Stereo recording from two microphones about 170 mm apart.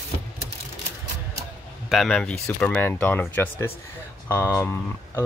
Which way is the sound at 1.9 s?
Centre (ahead or behind).